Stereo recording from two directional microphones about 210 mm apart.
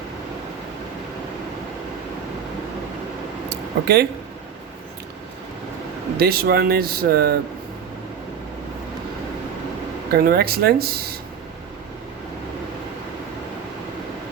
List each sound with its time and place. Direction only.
3.5 s a sound: 50° right (ahead or behind)
6.1 s speech: 45° right (ahead or behind)
10.1 s speech: 45° right (ahead or behind)